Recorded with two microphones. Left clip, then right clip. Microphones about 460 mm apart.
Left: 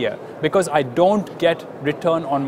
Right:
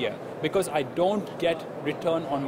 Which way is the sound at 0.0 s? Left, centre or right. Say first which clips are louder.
Left 7 dB; left.